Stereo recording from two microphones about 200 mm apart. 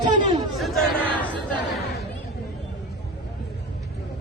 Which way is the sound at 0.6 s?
Centre (ahead or behind).